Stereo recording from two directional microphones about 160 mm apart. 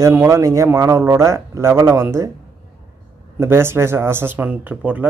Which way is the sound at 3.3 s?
15° right (ahead or behind).